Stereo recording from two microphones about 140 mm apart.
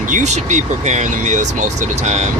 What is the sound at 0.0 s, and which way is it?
Speech, 60° right (ahead or behind).